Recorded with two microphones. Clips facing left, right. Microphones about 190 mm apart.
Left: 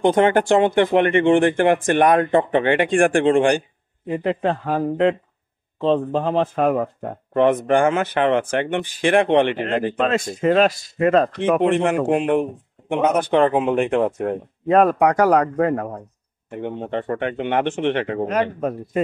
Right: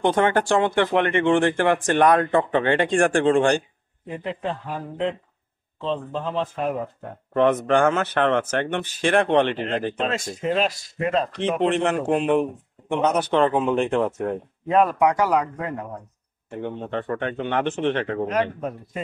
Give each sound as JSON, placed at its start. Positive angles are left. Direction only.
{"t": 0.0, "sound": "speech", "side_deg": 20}
{"t": 4.1, "sound": "speech", "side_deg": 65}
{"t": 7.3, "sound": "speech", "side_deg": 15}
{"t": 9.6, "sound": "speech", "side_deg": 55}
{"t": 11.6, "sound": "speech", "side_deg": 10}
{"t": 14.7, "sound": "speech", "side_deg": 50}
{"t": 15.4, "sound": "speech", "side_deg": 60}
{"t": 16.4, "sound": "speech", "side_deg": 20}
{"t": 18.6, "sound": "speech", "side_deg": 60}